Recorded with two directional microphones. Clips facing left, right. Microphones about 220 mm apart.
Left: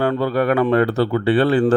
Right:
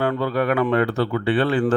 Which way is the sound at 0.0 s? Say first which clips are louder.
Left 3 dB; 35° left (ahead or behind).